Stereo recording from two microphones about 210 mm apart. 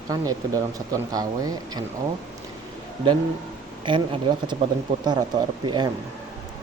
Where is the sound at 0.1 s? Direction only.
15° right (ahead or behind).